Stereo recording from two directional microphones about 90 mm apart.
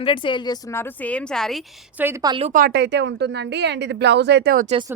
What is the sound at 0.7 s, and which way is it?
Speech, 25° left (ahead or behind).